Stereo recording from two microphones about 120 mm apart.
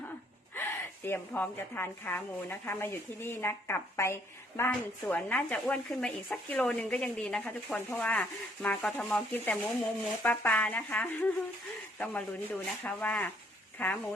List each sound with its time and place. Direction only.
0.5 s a woman's voice: 20° left (ahead or behind)
5.0 s speech: 10° left (ahead or behind)